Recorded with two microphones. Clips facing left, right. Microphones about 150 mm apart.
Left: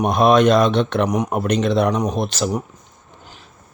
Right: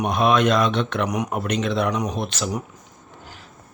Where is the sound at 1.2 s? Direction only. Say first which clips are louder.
Left 5 dB; 40° left (ahead or behind).